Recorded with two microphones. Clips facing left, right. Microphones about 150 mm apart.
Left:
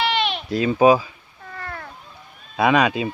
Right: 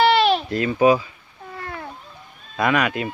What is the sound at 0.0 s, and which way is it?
Bleat, 40° right (ahead or behind).